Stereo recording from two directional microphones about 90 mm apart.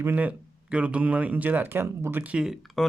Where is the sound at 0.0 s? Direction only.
20° right (ahead or behind).